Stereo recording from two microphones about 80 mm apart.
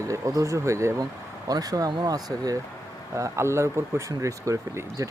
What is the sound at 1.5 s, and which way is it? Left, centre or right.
Speech, right.